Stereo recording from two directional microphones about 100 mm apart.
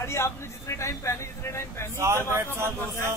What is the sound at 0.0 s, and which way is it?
Speech, 25° left (ahead or behind).